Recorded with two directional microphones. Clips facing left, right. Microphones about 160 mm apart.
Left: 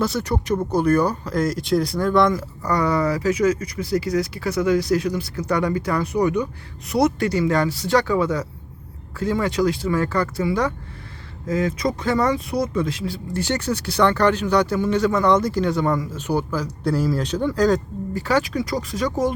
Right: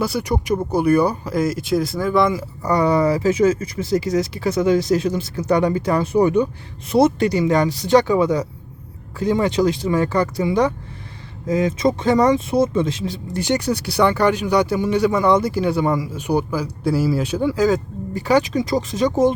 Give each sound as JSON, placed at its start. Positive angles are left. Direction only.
{"t": 0.0, "sound": "speech", "side_deg": -10}
{"t": 18.1, "sound": "speech", "side_deg": -15}